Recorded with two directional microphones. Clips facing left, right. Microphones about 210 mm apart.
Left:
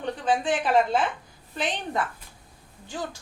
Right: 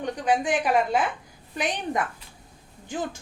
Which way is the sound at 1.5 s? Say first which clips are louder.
Right 1 dB; 15° right (ahead or behind).